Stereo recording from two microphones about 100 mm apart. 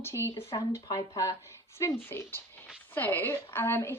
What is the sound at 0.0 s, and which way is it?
Speech, 25° left (ahead or behind).